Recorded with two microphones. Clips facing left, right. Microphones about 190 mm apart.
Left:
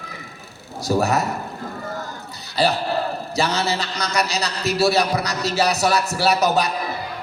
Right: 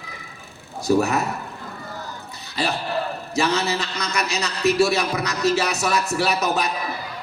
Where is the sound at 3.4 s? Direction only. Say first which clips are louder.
Right 1 dB; 35° left (ahead or behind).